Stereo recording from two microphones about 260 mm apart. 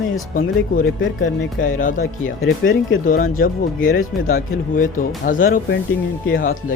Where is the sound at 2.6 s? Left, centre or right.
Left.